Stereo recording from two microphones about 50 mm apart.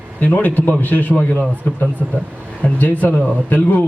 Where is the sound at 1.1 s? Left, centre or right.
Left.